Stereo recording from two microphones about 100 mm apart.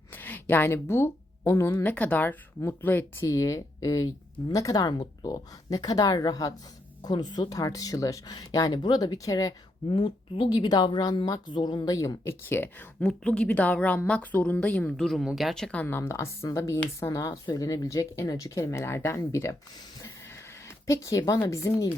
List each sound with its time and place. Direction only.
0.1 s a sound: 20° left (ahead or behind)
1.8 s a woman's voice: 15° left (ahead or behind)
3.2 s a woman's voice: 35° left (ahead or behind)
9.9 s a woman's voice: 60° left (ahead or behind); by 12.7 s 20° left (ahead or behind)
13.0 s a woman's voice: 10° left (ahead or behind)
14.8 s speech: centre (ahead or behind)
15.8 s a woman's voice: 20° left (ahead or behind)
20.7 s speech: 30° left (ahead or behind)